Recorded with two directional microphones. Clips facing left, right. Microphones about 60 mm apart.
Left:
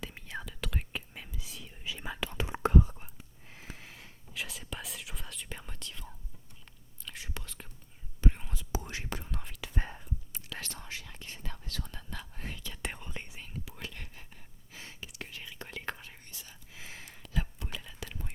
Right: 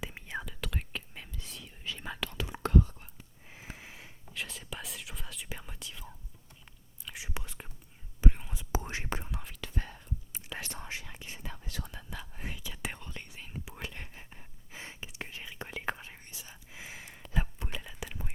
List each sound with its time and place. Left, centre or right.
0.0 s whispering: centre
2.3 s whispering: left
3.4 s sniff: centre
4.4 s whispering: centre
8.3 s whispering: centre
8.7 s whispering: right
9.7 s whispering: left
10.3 s whispering: centre
11.1 s whispering: centre
13.0 s whispering: centre
13.5 s whispering: right
17.2 s whispering: right